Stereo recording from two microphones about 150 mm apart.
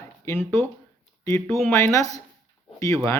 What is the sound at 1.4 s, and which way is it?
Speech, centre (ahead or behind).